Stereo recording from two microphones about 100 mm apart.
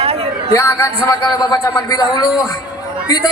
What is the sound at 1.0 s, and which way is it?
A man's voice, 40° left (ahead or behind).